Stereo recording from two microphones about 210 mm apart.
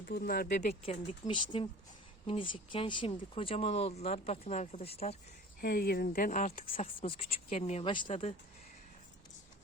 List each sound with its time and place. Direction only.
0.0 s speech: 45° left (ahead or behind); by 5.1 s 30° left (ahead or behind)
5.5 s speech: 45° left (ahead or behind); by 8.4 s 30° left (ahead or behind)